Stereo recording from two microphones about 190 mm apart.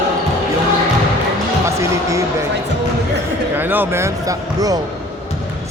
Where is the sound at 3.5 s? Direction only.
10° right (ahead or behind).